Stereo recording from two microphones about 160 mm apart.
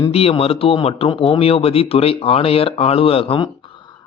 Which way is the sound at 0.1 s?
40° left (ahead or behind).